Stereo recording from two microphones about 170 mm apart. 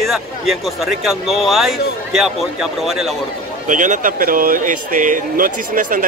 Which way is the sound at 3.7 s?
50° right (ahead or behind).